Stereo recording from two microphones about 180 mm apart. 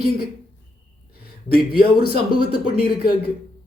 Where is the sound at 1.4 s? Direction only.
55° left (ahead or behind).